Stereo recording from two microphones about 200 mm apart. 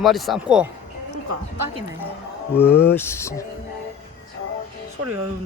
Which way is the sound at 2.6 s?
10° left (ahead or behind).